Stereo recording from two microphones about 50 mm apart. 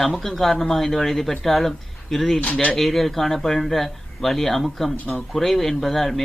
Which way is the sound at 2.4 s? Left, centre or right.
Left.